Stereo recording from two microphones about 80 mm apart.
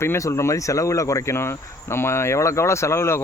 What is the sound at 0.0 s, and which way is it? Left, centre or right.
Speech, left.